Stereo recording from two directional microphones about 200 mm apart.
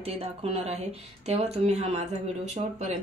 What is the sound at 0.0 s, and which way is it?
Speech, 30° right (ahead or behind).